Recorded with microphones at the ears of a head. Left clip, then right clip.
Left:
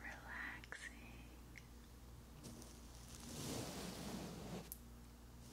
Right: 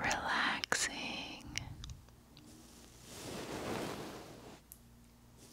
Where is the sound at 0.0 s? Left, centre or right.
Right.